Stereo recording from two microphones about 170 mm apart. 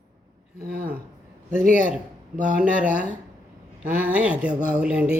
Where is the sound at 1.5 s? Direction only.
50° right (ahead or behind).